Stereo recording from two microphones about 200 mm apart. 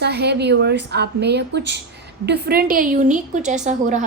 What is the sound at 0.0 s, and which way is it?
A woman's voice, 55° right (ahead or behind).